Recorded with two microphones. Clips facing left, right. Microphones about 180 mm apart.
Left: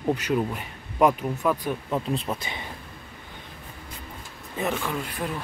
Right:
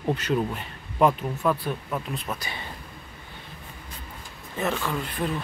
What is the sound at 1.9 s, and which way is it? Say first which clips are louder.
Speech: left 4 dB; 25° left (ahead or behind).